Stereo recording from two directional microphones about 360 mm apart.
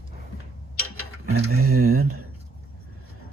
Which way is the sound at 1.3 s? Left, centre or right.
Right.